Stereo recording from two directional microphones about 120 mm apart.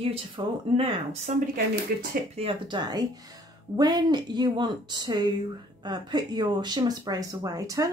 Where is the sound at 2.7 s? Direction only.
35° right (ahead or behind).